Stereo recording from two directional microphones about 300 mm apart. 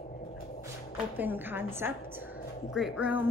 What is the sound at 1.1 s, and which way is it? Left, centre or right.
A woman's voice, centre.